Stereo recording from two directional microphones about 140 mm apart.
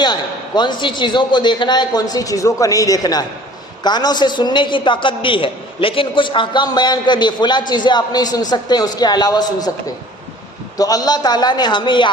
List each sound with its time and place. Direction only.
0.0 s a man's voice: 30° left (ahead or behind)
10.8 s a man's voice: 25° left (ahead or behind)